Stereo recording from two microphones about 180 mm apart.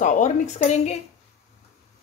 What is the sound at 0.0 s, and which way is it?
Speech, 45° left (ahead or behind).